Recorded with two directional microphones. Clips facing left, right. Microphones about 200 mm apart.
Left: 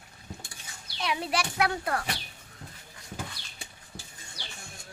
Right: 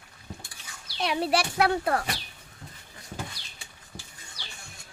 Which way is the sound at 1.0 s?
30° right (ahead or behind).